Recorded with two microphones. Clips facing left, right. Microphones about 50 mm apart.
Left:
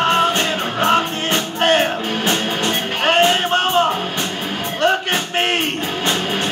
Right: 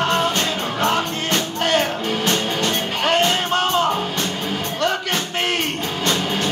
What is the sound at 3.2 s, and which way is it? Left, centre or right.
Music, left.